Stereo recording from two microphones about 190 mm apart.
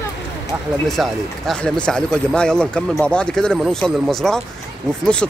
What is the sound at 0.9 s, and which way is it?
Speech, centre (ahead or behind).